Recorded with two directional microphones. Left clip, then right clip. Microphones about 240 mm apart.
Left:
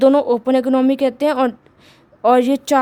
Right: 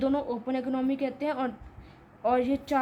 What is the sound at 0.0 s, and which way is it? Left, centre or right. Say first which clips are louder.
A woman's voice: left 16 dB; left.